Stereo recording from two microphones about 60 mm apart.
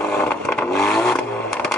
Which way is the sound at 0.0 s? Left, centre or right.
Centre.